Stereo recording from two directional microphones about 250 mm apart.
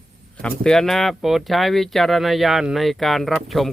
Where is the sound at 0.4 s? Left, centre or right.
Centre.